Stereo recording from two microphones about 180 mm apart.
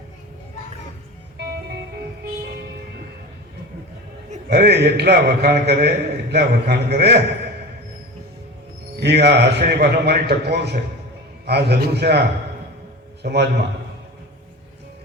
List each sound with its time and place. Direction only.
4.4 s a man's voice: 65° right (ahead or behind)
9.0 s a man's voice: 70° right (ahead or behind)
13.2 s a man's voice: 65° right (ahead or behind)